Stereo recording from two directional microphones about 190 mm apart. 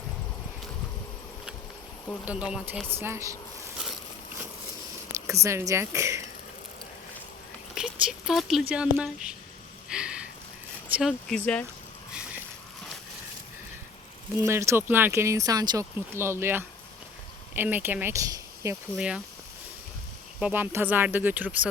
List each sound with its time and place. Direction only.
2.2 s speech: 5° right (ahead or behind)
3.0 s speech: 15° right (ahead or behind)
5.2 s speech: 15° right (ahead or behind)
7.8 s a sound: centre (ahead or behind)
8.7 s speech: 5° right (ahead or behind)
9.9 s a sound: 5° right (ahead or behind)
10.8 s vehicle: 5° right (ahead or behind)
11.3 s speech: 5° left (ahead or behind)
14.4 s speech: 15° right (ahead or behind)
18.9 s speech: 5° right (ahead or behind)
20.4 s speech: 10° right (ahead or behind)